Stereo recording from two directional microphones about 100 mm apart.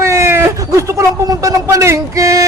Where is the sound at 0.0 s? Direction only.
25° right (ahead or behind).